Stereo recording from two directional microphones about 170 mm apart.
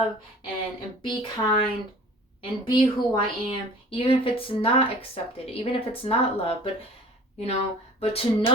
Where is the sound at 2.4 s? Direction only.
25° left (ahead or behind).